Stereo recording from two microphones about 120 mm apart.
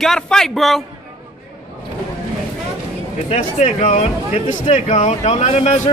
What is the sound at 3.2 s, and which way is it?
Speech, 75° left (ahead or behind).